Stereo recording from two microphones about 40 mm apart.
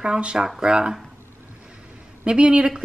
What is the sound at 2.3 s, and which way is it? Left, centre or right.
Chopping, right.